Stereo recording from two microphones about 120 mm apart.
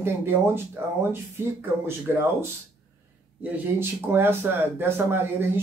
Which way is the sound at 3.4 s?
20° right (ahead or behind).